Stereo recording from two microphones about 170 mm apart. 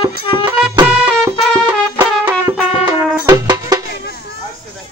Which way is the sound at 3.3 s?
25° right (ahead or behind).